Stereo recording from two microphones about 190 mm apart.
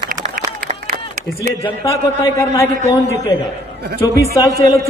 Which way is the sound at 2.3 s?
15° left (ahead or behind).